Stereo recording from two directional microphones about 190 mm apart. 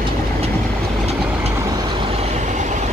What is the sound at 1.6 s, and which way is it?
Vehicle, 20° right (ahead or behind).